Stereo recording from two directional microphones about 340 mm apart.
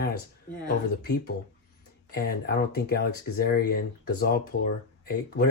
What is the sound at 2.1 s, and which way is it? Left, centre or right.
Speech, left.